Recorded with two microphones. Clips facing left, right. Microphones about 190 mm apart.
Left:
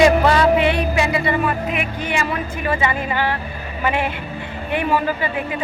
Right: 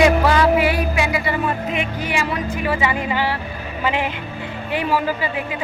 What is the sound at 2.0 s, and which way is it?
A woman's voice, 10° right (ahead or behind).